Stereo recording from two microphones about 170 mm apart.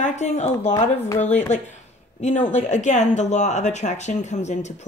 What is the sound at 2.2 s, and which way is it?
Speech, 45° left (ahead or behind).